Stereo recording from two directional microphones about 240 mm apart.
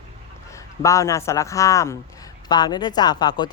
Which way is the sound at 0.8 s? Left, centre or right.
Centre.